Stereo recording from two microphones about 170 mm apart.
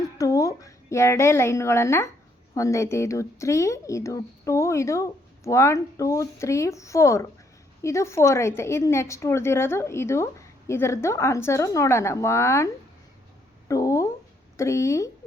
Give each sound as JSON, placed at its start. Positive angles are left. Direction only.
{"t": 0.2, "sound": "a woman's voice", "side_deg": 20}
{"t": 13.7, "sound": "a sound", "side_deg": 20}
{"t": 14.5, "sound": "a woman's voice", "side_deg": 15}